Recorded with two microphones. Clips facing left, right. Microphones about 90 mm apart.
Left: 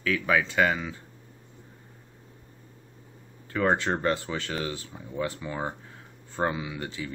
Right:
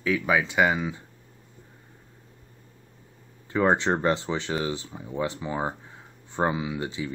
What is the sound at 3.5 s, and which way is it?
Speech, 20° right (ahead or behind).